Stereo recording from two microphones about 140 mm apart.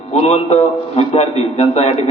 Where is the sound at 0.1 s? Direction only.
50° left (ahead or behind).